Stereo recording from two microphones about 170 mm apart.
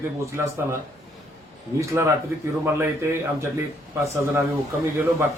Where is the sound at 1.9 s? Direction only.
15° right (ahead or behind).